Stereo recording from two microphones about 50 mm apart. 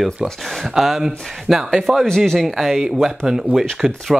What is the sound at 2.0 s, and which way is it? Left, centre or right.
Speech, centre.